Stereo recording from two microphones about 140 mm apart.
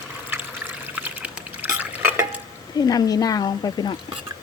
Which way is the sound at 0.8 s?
10° right (ahead or behind).